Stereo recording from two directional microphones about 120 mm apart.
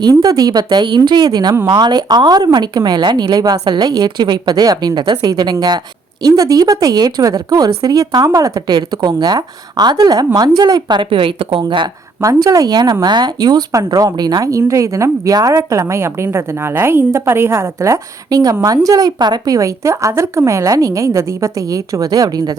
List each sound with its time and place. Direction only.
0.0 s a woman's voice: 35° right (ahead or behind)
12.2 s speech: 25° right (ahead or behind)